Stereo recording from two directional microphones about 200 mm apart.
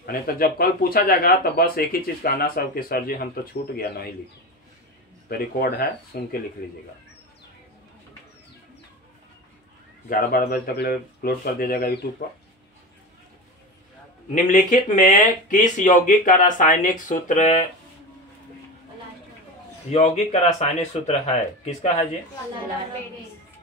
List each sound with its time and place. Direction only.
0.0 s speech: 45° left (ahead or behind)
5.3 s speech: 50° left (ahead or behind)
10.0 s speech: 45° left (ahead or behind)
14.3 s speech: 40° left (ahead or behind)
19.9 s speech: 35° left (ahead or behind)